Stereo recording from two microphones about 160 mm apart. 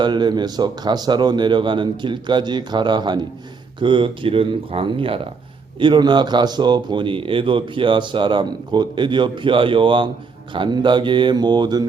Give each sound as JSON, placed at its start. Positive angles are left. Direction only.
{"t": 0.0, "sound": "speech", "side_deg": -30}